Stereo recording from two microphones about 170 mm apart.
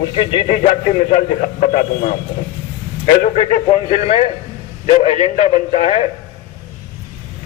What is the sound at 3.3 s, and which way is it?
Speech, 40° left (ahead or behind).